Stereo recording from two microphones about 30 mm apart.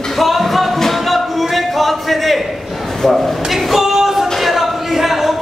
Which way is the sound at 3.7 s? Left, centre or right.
Centre.